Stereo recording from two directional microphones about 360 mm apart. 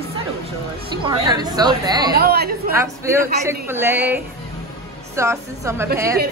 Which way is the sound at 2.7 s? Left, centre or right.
Centre.